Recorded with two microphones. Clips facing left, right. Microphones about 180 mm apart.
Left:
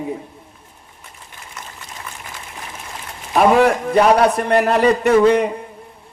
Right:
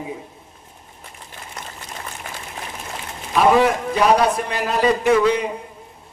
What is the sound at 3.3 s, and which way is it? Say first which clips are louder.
A man's voice: left 2 dB; 55° left (ahead or behind).